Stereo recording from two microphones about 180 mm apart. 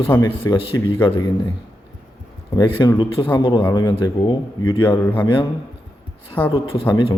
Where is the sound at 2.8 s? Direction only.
25° left (ahead or behind).